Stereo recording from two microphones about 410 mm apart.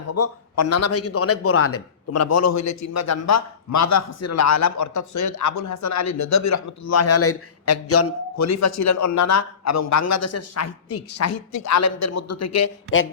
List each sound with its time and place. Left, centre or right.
0.1 s a man's voice: left